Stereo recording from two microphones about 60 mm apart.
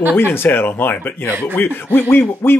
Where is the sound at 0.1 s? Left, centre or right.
Left.